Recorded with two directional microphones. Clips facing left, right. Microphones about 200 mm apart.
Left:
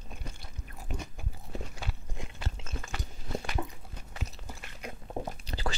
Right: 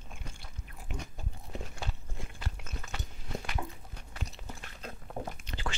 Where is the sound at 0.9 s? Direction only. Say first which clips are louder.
Left 2 dB; 40° left (ahead or behind).